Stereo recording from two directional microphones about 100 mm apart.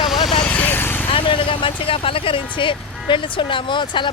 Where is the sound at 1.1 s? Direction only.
60° left (ahead or behind).